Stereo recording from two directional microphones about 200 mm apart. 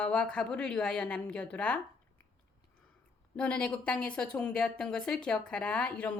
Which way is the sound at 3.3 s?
5° left (ahead or behind).